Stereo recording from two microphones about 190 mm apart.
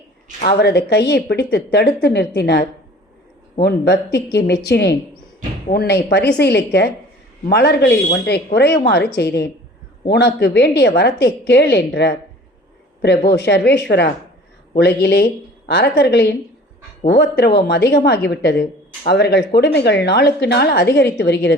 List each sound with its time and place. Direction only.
0.4 s speech: 55° left (ahead or behind)
13.3 s speech: 60° left (ahead or behind)